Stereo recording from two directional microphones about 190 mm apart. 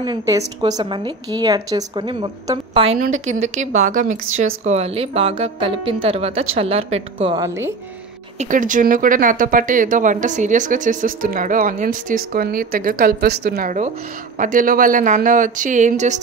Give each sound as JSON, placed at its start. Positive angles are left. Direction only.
{"t": 0.0, "sound": "speech", "side_deg": -20}
{"t": 3.0, "sound": "speech", "side_deg": -40}
{"t": 7.4, "sound": "speech", "side_deg": -15}
{"t": 8.4, "sound": "speech", "side_deg": -45}